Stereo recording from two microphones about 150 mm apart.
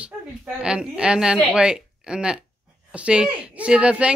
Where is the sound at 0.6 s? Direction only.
5° right (ahead or behind).